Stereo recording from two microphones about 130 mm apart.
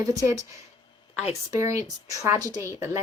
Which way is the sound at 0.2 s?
25° right (ahead or behind).